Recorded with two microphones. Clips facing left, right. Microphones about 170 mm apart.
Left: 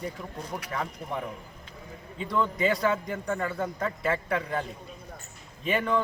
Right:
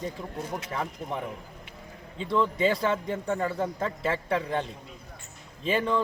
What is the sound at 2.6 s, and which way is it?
A man's voice, 30° right (ahead or behind).